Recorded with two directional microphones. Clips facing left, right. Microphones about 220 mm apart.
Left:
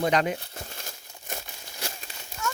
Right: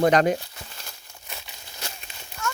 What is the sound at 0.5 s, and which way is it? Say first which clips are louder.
Crumpling: left 4 dB; 45° left (ahead or behind).